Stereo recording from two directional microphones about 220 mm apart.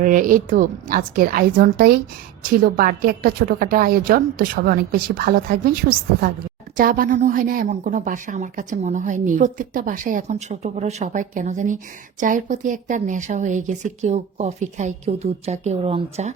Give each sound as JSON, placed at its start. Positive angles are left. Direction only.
{"t": 0.0, "sound": "a woman's voice", "side_deg": -35}
{"t": 6.7, "sound": "a woman's voice", "side_deg": -40}